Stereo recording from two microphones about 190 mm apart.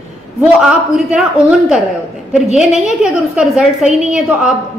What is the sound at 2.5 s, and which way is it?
A woman's voice, centre (ahead or behind).